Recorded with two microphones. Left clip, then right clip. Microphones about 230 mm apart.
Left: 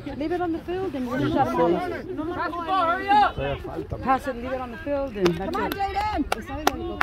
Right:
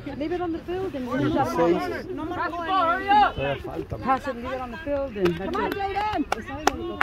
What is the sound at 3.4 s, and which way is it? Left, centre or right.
Speech, centre.